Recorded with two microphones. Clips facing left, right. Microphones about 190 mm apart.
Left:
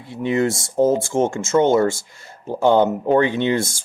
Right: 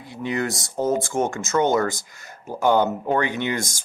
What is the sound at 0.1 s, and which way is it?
Speech, 25° left (ahead or behind).